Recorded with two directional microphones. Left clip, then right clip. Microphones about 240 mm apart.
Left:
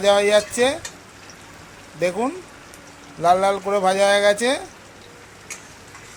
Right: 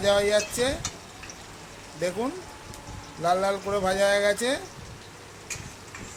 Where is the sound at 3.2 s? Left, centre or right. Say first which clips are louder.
Left 7 dB; centre.